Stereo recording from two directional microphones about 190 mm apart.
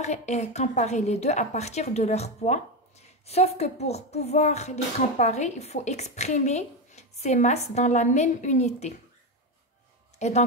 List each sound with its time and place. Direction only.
0.0 s a woman's voice: 35° left (ahead or behind)
10.1 s speech: 35° left (ahead or behind)